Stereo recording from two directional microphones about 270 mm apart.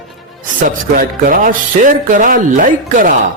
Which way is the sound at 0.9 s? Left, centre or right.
Right.